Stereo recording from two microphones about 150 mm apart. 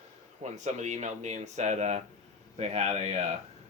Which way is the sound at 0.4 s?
50° right (ahead or behind).